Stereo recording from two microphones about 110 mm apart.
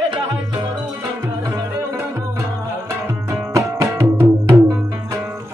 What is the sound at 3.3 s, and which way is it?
Music, 30° right (ahead or behind).